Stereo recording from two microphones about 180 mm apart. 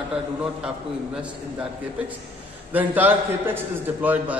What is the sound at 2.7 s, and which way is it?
A man's voice, 10° right (ahead or behind).